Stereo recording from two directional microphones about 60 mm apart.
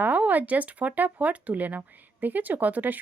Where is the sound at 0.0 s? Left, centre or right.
Right.